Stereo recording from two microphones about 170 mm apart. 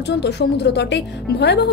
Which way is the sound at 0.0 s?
85° left.